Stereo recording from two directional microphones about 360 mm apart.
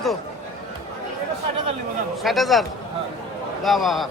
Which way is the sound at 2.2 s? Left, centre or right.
Centre.